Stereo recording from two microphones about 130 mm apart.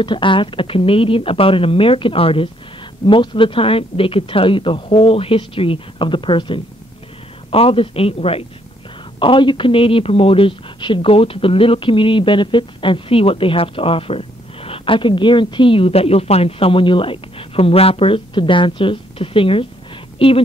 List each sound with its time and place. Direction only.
0.0 s a woman's voice: 40° left (ahead or behind)